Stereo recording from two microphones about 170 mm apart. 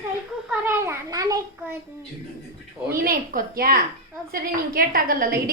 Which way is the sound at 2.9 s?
60° right (ahead or behind).